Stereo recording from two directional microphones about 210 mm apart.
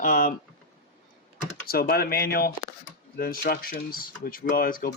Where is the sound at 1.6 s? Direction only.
45° left (ahead or behind).